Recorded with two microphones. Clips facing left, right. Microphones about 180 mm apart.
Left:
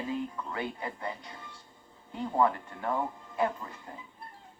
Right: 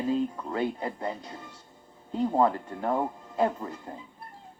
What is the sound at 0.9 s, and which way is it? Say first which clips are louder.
Speech: right 5 dB; 40° right (ahead or behind).